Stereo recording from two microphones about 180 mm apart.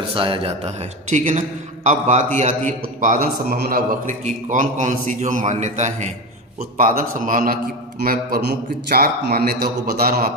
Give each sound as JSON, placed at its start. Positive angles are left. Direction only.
{"t": 0.2, "sound": "a man's voice", "side_deg": -30}